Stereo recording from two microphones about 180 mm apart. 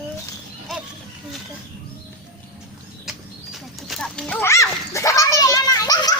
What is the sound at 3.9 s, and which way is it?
Children playing, 5° left (ahead or behind).